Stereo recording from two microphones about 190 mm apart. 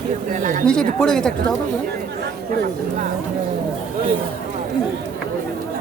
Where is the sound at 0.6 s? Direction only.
5° left (ahead or behind).